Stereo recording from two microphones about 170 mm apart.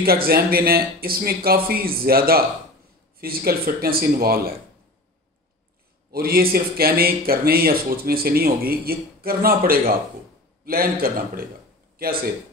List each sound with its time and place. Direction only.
0.0 s speech: 60° right (ahead or behind)
6.1 s speech: 60° right (ahead or behind)